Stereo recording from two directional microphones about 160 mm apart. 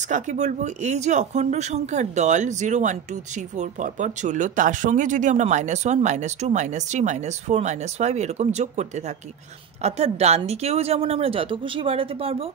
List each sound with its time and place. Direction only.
0.1 s a woman's voice: 50° right (ahead or behind)